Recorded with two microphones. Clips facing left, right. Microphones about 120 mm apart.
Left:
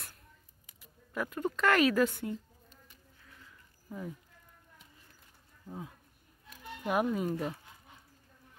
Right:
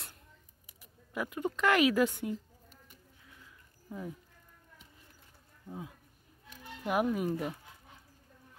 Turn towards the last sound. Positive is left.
turn(degrees=-10)  # may be behind; listen again after turning